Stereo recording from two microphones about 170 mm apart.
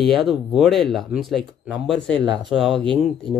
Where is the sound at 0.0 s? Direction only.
Centre (ahead or behind).